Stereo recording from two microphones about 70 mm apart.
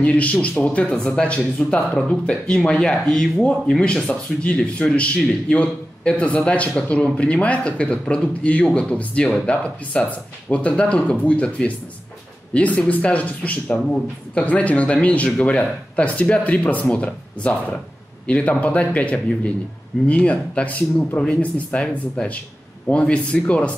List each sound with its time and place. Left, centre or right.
0.0 s a man's voice: centre